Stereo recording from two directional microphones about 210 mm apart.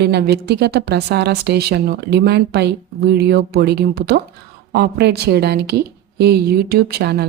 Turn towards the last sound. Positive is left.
turn(degrees=-50)  # may be behind; listen again after turning